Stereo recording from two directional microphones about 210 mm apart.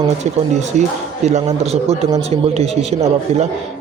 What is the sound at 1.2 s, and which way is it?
A man's voice, 30° right (ahead or behind).